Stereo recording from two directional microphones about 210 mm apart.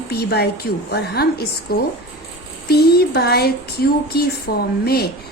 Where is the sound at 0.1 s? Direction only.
50° left (ahead or behind).